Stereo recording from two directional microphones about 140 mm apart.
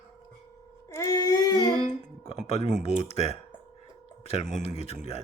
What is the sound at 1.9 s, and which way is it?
Music, 50° left (ahead or behind).